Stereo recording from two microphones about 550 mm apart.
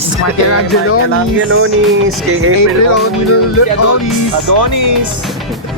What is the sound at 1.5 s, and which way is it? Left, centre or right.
Speech, right.